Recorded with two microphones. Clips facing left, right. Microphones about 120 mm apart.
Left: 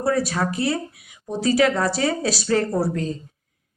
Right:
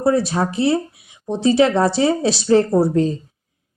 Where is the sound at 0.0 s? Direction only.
25° right (ahead or behind).